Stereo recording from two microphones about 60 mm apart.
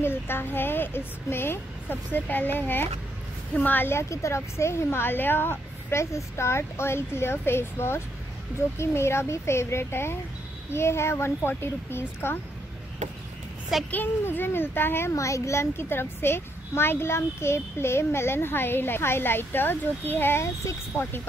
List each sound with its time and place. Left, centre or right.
0.0 s a child's voice: left
3.9 s a woman's voice: left
13.7 s a woman's voice: centre
14.2 s a child's voice: left
15.1 s a child's voice: left